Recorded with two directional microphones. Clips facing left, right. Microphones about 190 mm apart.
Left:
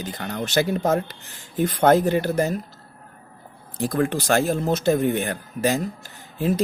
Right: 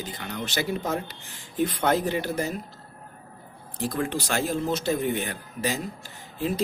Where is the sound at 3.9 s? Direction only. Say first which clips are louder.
Left 7 dB; 50° left (ahead or behind).